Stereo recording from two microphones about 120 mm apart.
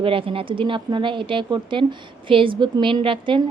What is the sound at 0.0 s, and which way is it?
A woman's voice, 50° right (ahead or behind).